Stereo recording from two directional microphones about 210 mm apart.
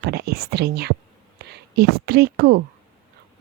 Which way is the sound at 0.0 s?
50° right (ahead or behind).